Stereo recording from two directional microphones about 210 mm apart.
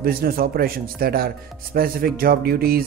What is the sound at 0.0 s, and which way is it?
Speech, 45° right (ahead or behind).